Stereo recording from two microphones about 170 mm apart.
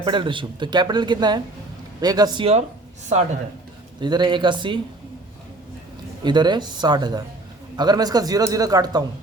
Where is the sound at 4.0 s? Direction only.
25° right (ahead or behind).